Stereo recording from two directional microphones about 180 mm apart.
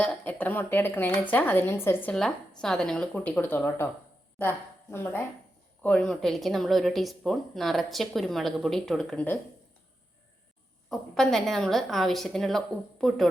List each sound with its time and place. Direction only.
0.0 s a woman's voice: 10° left (ahead or behind)
10.8 s speech: centre (ahead or behind)